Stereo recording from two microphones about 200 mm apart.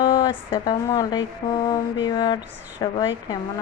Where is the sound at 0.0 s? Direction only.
25° left (ahead or behind).